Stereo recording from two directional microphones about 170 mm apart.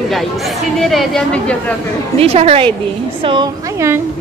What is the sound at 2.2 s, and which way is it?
A woman's voice, 40° right (ahead or behind).